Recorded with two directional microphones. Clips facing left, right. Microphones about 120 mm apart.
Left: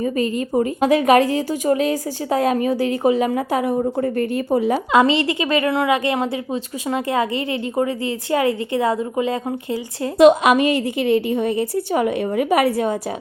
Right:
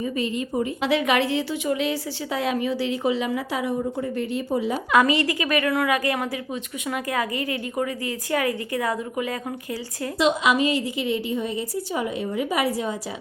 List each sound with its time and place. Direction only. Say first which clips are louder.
0.0 s a woman's voice: left 5 dB; 45° left (ahead or behind)
4.9 s a woman's voice: left 2 dB; 25° left (ahead or behind)
10.2 s a woman's voice: left 9 dB; 55° left (ahead or behind)